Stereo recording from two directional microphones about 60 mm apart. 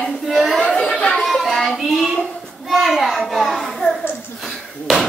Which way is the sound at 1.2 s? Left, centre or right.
Centre.